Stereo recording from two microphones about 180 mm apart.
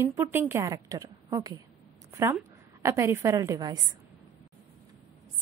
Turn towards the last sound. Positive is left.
turn(degrees=-20)  # may be behind; listen again after turning